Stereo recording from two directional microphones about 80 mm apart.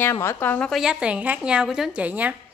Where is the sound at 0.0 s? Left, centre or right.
Left.